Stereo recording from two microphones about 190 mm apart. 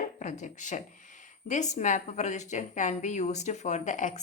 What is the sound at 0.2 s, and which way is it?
Speech, 40° left (ahead or behind).